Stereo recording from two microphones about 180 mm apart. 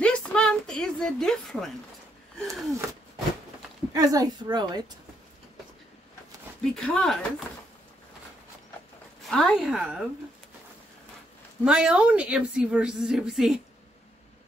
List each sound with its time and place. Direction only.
0.0 s a sound: 5° left (ahead or behind)
3.9 s a woman's voice: 20° right (ahead or behind)
6.6 s a woman's voice: 5° left (ahead or behind)
9.2 s a woman's voice: 5° left (ahead or behind)
11.6 s a woman's voice: 5° right (ahead or behind)